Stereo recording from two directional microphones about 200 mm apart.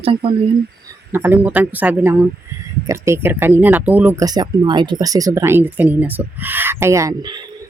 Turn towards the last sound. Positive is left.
turn(degrees=-20)  # may be behind; listen again after turning